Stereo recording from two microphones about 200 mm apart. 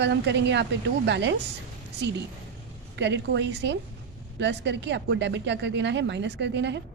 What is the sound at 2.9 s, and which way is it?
A woman's voice, 60° right (ahead or behind).